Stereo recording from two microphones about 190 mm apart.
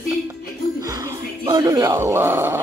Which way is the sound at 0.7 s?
20° right (ahead or behind).